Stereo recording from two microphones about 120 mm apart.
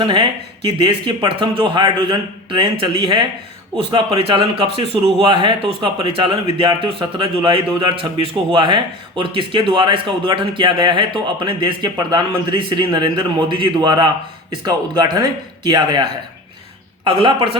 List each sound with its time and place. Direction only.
0.0 s speech: 40° right (ahead or behind)